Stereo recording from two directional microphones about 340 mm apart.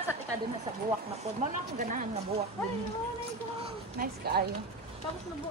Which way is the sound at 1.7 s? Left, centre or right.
Right.